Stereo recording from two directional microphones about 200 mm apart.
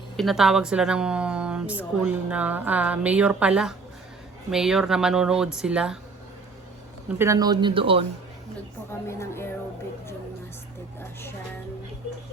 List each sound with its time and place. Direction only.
0.2 s speech: centre (ahead or behind)
7.2 s speech: 15° right (ahead or behind)
8.9 s a woman's voice: 15° left (ahead or behind)